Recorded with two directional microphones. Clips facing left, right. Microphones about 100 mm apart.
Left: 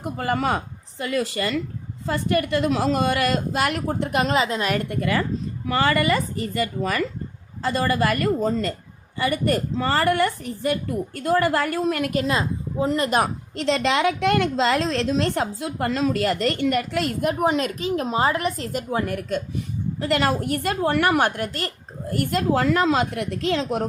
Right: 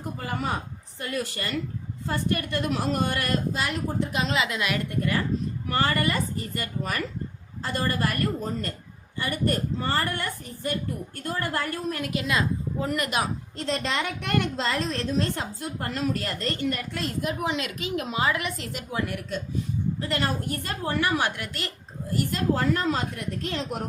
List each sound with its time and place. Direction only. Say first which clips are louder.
0.0 s a woman's voice: left 7 dB; 75° left (ahead or behind); by 4.4 s 55° left (ahead or behind)
4.4 s a woman's voice: left 5 dB; 40° left (ahead or behind)
4.9 s a woman's voice: left 3 dB; 90° left
7.6 s a woman's voice: left 6 dB; 90° left
12.1 s a woman's voice: left 3 dB; 35° left (ahead or behind)
13.1 s a woman's voice: left 6 dB; 45° left (ahead or behind)
13.6 s a woman's voice: left 8 dB; 90° left; by 19.4 s 45° left (ahead or behind)
19.5 s a woman's voice: left 1 dB; 75° left (ahead or behind); by 21.7 s 45° left (ahead or behind)
22.1 s a woman's voice: left 4 dB; 60° left (ahead or behind); by 23.8 s 90° left